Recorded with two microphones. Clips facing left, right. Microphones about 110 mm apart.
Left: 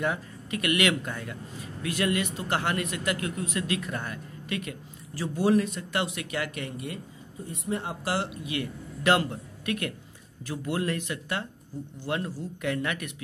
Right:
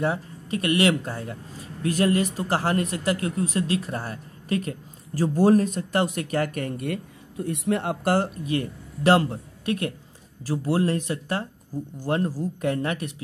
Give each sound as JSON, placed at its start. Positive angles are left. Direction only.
{"t": 0.0, "sound": "a man's voice", "side_deg": -30}